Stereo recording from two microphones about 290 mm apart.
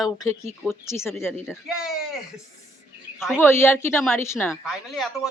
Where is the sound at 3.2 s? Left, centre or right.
Centre.